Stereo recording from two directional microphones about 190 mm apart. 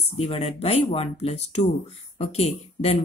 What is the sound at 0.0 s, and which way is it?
Speech, 30° left (ahead or behind).